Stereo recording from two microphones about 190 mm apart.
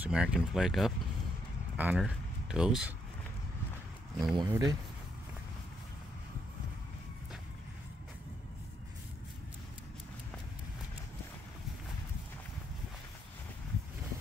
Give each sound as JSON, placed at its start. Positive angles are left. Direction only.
{"t": 0.0, "sound": "speech", "side_deg": -5}
{"t": 4.4, "sound": "speech", "side_deg": -20}